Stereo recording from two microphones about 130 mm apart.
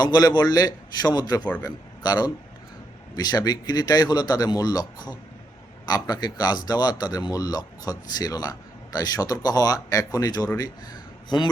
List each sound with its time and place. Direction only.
0.0 s a man's voice: 30° left (ahead or behind)